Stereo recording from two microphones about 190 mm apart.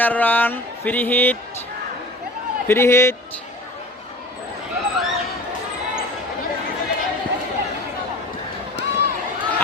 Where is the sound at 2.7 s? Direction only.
15° left (ahead or behind).